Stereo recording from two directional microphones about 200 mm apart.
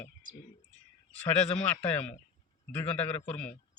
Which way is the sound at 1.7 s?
10° left (ahead or behind).